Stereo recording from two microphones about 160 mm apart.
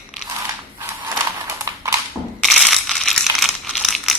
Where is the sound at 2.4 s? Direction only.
Centre (ahead or behind).